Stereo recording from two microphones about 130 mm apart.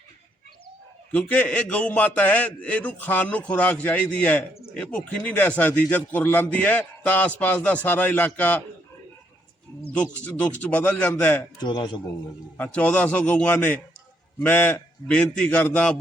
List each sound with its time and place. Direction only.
1.1 s a man's voice: 10° left (ahead or behind)
9.9 s a man's voice: 10° left (ahead or behind)
11.6 s a man's voice: 35° left (ahead or behind)
12.5 s a man's voice: 10° left (ahead or behind)